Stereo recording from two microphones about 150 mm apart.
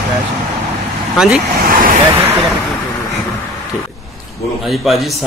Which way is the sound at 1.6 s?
70° right (ahead or behind).